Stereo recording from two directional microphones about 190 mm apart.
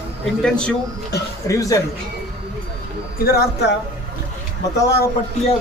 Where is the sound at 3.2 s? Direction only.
55° left (ahead or behind).